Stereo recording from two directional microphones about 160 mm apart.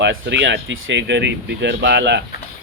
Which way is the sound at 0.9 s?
90° right.